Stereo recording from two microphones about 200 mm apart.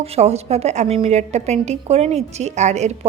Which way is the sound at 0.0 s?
30° right (ahead or behind).